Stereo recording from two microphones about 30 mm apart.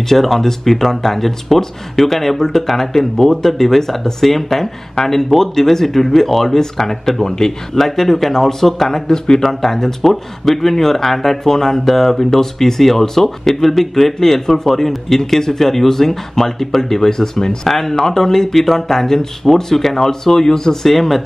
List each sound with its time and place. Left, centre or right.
0.1 s speech: centre
9.4 s speech: centre
17.6 s speech: centre